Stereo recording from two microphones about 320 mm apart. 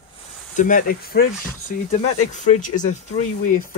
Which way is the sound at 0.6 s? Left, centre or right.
Left.